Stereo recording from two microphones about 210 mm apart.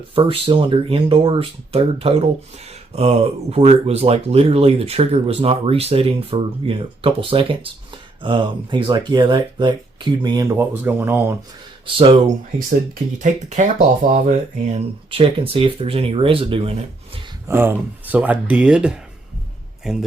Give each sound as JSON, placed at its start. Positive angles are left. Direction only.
{"t": 0.1, "sound": "speech", "side_deg": -25}
{"t": 11.9, "sound": "speech", "side_deg": -30}
{"t": 17.5, "sound": "a man's voice", "side_deg": -10}